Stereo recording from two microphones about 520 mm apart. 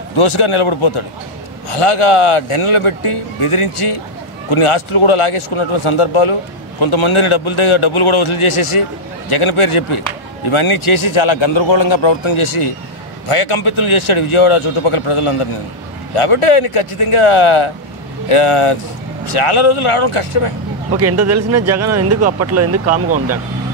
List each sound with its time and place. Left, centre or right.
0.2 s a man's voice: left
20.9 s speech: right
22.8 s speech: centre